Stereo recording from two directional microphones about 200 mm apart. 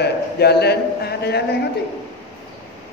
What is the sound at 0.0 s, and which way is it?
A man's voice, 55° left (ahead or behind).